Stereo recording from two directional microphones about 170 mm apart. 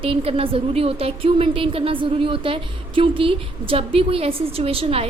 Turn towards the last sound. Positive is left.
turn(degrees=-35)  # may be behind; listen again after turning